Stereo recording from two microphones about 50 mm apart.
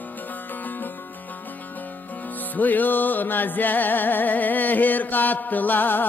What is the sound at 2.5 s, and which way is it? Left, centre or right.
Music, left.